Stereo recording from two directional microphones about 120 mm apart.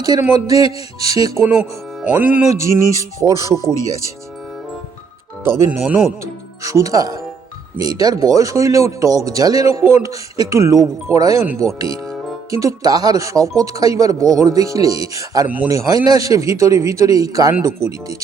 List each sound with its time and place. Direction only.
0.3 s speech: 30° right (ahead or behind)
2.1 s speech: 15° right (ahead or behind)
2.5 s speech: 25° right (ahead or behind)
5.5 s speech: 20° right (ahead or behind)
5.8 s speech: 5° right (ahead or behind)
6.6 s speech: 25° right (ahead or behind)
15.4 s speech: 15° right (ahead or behind)
15.7 s speech: 25° right (ahead or behind)